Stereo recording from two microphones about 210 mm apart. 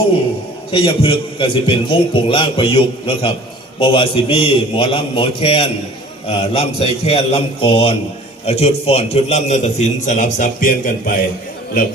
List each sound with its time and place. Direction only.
0.7 s a man's voice: 25° left (ahead or behind); by 11.1 s 40° left (ahead or behind)